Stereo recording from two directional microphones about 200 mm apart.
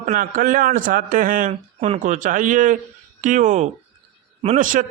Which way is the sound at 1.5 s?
30° right (ahead or behind).